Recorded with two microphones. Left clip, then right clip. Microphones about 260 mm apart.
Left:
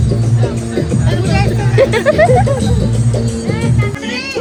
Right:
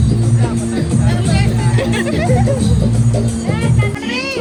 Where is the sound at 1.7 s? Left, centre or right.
Left.